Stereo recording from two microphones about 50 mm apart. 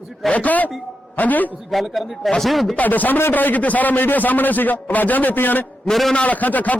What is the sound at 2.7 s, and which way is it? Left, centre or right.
A man's voice, left.